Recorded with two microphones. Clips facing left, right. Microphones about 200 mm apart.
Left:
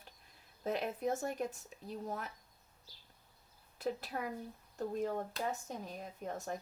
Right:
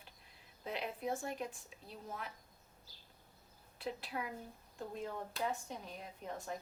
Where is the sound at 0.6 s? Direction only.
45° left (ahead or behind).